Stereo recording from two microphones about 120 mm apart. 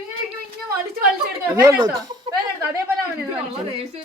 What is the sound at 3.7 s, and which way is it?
Speech, 55° right (ahead or behind).